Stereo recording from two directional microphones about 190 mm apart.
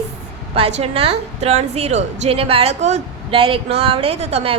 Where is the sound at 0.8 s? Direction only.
30° right (ahead or behind).